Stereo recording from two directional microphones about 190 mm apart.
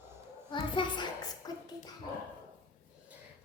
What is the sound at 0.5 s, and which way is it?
A child's voice, 25° left (ahead or behind).